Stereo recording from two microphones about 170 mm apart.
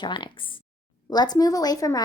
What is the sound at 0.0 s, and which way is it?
A woman's voice, 25° left (ahead or behind).